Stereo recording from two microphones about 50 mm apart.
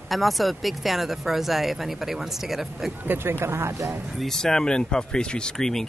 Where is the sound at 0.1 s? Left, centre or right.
Centre.